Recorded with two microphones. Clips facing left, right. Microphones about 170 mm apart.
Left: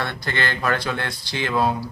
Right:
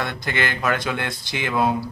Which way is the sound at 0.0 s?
15° right (ahead or behind).